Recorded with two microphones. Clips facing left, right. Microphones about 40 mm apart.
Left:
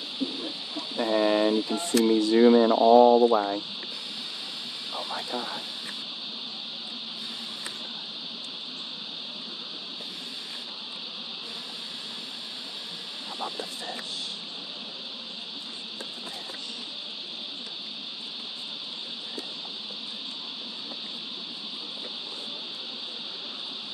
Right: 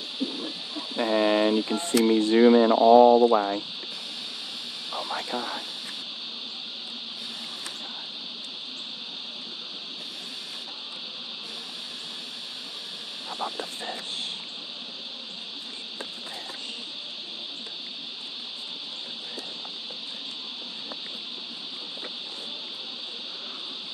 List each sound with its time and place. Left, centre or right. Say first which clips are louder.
0.7 s chicken: right 1 dB; right
1.8 s speech: right 1 dB; right
4.9 s speech: right 2 dB; right
13.4 s speech: right 2 dB; right